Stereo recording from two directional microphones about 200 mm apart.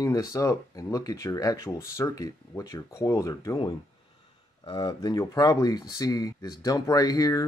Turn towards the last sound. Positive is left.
turn(degrees=20)  # may be behind; listen again after turning